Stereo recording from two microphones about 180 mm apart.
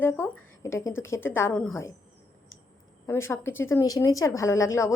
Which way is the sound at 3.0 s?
15° left (ahead or behind).